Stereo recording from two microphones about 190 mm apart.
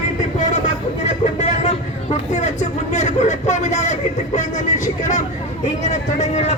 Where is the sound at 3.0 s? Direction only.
40° left (ahead or behind).